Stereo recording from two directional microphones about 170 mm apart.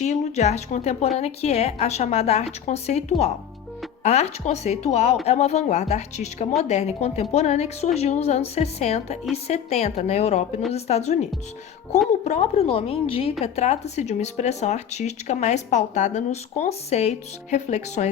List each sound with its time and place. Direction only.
0.0 s speech: 40° left (ahead or behind)